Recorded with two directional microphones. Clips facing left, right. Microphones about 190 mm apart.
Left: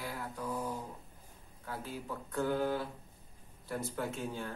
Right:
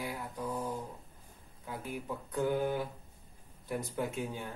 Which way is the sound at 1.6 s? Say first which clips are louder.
Right 1 dB; 15° right (ahead or behind).